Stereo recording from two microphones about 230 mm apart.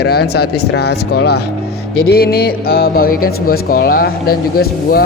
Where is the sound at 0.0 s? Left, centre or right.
Left.